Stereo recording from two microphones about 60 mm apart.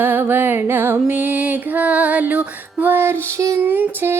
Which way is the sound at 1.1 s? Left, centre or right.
Right.